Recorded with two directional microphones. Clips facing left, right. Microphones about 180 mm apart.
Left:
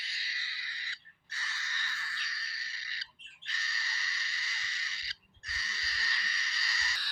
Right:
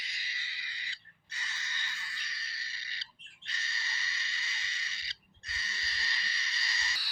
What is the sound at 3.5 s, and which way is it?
Crow, 25° right (ahead or behind).